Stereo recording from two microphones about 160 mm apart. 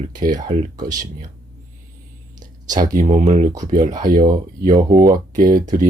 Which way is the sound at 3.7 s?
50° right (ahead or behind).